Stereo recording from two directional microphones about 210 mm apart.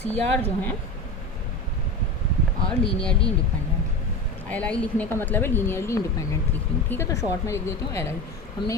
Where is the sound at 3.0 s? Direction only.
5° left (ahead or behind).